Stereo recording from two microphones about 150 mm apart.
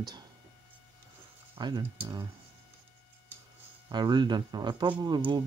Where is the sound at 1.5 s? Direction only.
35° right (ahead or behind).